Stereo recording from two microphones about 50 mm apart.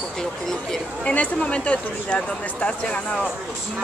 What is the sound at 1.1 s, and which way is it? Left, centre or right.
Speech, left.